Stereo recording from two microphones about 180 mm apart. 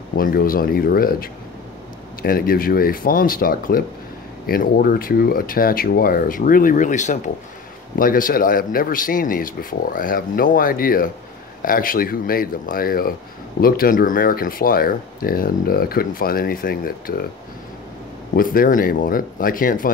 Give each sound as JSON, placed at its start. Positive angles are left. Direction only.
{"t": 0.1, "sound": "speech", "side_deg": 55}
{"t": 18.3, "sound": "speech", "side_deg": 55}